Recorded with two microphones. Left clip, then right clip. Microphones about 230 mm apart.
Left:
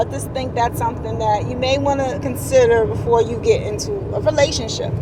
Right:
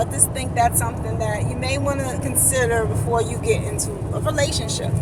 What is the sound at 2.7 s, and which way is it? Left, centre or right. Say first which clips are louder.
Speech: left 6 dB; centre.